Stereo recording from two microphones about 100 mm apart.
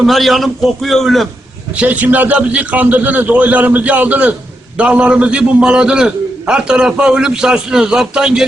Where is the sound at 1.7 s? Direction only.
15° right (ahead or behind).